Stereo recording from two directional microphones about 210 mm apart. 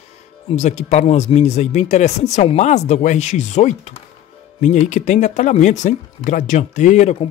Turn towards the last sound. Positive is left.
turn(degrees=35)  # may be behind; listen again after turning